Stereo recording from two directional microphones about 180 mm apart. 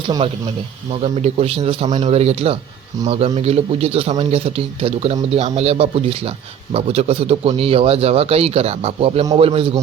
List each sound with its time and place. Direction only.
1.0 s a man's voice: 35° right (ahead or behind)